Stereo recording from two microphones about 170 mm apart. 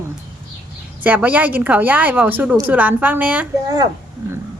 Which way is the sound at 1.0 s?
10° right (ahead or behind).